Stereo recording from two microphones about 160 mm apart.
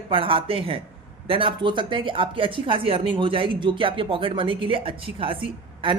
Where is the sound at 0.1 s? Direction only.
35° right (ahead or behind).